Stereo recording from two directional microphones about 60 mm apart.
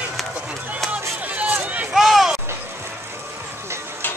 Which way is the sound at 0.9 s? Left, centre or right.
Right.